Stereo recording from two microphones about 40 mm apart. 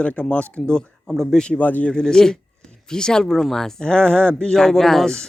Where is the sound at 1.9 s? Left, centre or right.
Centre.